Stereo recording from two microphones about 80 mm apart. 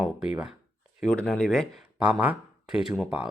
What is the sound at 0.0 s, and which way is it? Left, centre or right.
Speech, centre.